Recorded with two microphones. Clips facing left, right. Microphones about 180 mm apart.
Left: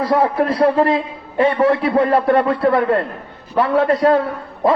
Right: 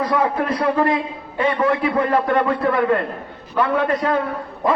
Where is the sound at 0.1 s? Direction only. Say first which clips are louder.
Left 4 dB; 30° left (ahead or behind).